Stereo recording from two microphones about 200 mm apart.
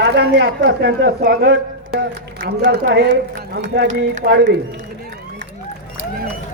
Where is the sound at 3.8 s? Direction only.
40° right (ahead or behind).